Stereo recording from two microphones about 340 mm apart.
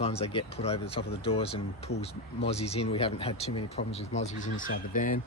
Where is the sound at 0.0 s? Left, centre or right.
Centre.